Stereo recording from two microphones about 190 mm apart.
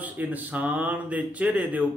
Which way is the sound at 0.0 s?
10° right (ahead or behind).